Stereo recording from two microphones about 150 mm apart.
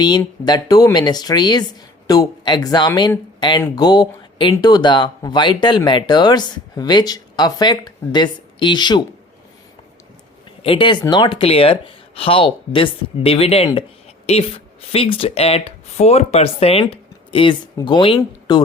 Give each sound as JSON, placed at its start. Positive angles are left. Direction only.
{"t": 0.4, "sound": "speech", "side_deg": 25}
{"t": 10.6, "sound": "speech", "side_deg": 35}